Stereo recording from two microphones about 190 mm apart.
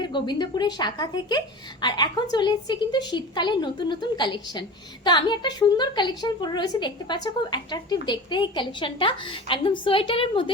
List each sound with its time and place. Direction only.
0.0 s a woman's voice: 25° left (ahead or behind)